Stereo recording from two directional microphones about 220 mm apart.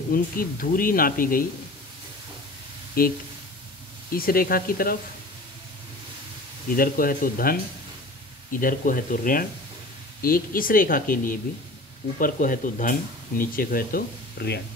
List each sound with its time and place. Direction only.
0.1 s speech: 40° left (ahead or behind)
3.0 s speech: 40° left (ahead or behind)
6.7 s speech: 40° left (ahead or behind)